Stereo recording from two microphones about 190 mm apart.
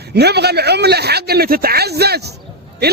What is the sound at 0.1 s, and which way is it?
A man's voice, 60° right (ahead or behind).